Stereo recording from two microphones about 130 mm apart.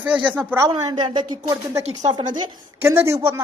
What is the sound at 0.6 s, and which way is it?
A woman's voice, 35° right (ahead or behind).